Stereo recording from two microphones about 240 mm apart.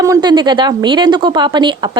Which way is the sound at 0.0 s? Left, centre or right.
Centre.